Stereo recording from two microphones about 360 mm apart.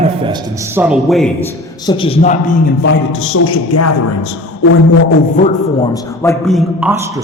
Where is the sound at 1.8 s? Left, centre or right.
Centre; by 4.3 s left.